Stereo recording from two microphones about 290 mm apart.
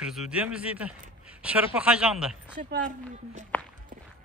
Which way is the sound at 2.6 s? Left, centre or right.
Right.